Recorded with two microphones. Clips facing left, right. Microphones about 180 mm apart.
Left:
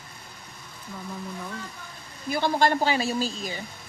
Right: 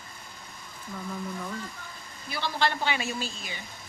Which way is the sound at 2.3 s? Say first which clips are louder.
Left 6 dB; 50° left (ahead or behind).